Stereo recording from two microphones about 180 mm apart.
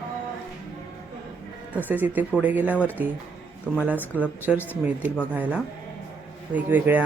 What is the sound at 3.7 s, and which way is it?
Speech, 5° left (ahead or behind).